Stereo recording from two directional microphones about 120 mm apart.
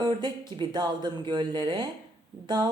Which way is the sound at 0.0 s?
35° right (ahead or behind).